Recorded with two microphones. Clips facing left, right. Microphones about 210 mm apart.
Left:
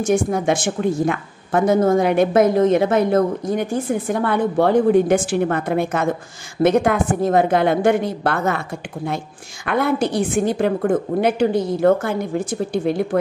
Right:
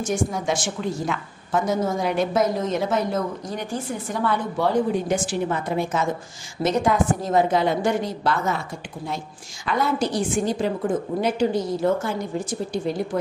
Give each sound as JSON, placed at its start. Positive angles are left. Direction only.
{"t": 0.0, "sound": "a woman's voice", "side_deg": 60}